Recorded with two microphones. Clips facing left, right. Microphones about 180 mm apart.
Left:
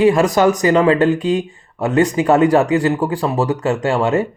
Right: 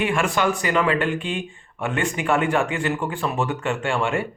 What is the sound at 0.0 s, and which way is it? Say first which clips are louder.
Speech: left 9 dB; 40° left (ahead or behind).